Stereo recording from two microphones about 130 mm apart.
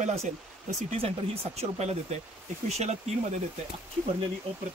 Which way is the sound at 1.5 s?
55° right (ahead or behind).